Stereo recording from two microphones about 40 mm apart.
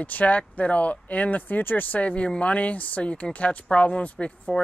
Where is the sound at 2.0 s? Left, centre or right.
Left.